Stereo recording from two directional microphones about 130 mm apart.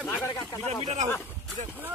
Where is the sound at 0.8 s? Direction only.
55° right (ahead or behind).